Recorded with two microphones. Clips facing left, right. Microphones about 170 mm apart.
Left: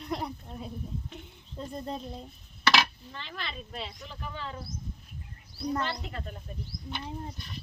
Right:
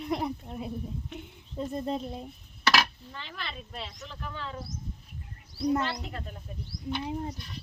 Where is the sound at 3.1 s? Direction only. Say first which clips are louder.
Even; 5° right (ahead or behind).